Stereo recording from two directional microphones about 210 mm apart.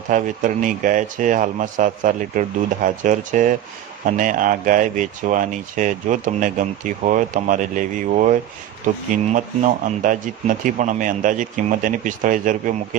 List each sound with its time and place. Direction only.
0.1 s speech: 40° right (ahead or behind)
9.8 s speech: 40° right (ahead or behind)